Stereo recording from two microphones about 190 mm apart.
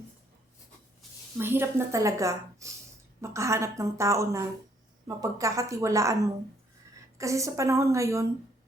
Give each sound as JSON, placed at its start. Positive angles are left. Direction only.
{"t": 1.4, "sound": "a woman's voice", "side_deg": -10}